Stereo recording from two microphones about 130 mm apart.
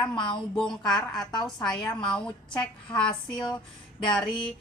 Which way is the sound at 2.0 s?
5° left (ahead or behind).